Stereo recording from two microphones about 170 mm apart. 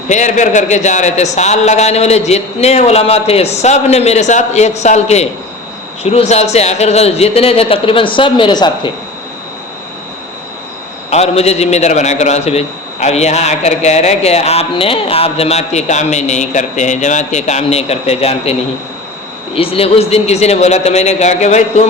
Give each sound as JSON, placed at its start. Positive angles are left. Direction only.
{"t": 0.1, "sound": "a man's voice", "side_deg": 45}
{"t": 11.1, "sound": "a man's voice", "side_deg": 40}
{"t": 19.5, "sound": "a man's voice", "side_deg": 35}